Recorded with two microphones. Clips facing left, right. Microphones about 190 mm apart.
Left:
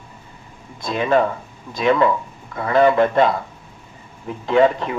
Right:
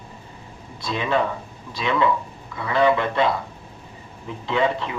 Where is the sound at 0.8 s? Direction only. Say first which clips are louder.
Left 5 dB; 45° left (ahead or behind).